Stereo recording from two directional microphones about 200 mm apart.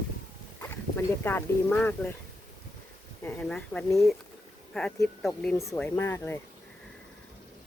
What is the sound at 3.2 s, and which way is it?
Speech, 10° left (ahead or behind).